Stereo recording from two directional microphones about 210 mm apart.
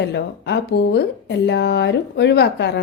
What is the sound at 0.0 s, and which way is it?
Speech, 55° left (ahead or behind).